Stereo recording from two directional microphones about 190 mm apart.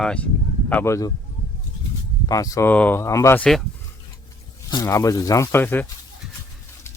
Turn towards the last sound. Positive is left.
turn(degrees=10)  # may be behind; listen again after turning